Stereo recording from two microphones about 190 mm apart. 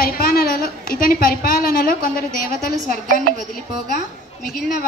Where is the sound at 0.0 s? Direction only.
50° left (ahead or behind).